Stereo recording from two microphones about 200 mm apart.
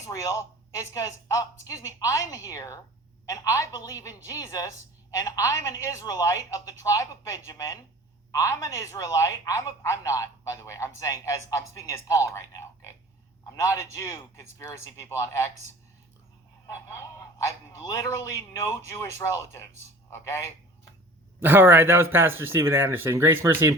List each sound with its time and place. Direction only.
0.0 s speech: 15° left (ahead or behind)
16.6 s a man's voice: 15° left (ahead or behind)
21.4 s speech: 10° right (ahead or behind)